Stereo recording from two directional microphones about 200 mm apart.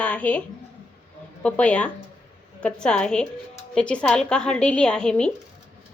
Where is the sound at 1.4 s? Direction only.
5° left (ahead or behind).